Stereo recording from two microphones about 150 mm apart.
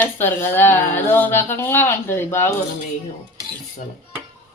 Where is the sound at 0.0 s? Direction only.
15° left (ahead or behind).